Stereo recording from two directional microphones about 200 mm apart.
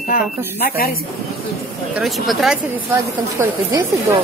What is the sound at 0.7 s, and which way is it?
Speech, 50° left (ahead or behind).